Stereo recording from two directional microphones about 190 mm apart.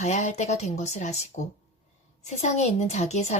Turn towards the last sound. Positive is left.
turn(degrees=35)  # may be behind; listen again after turning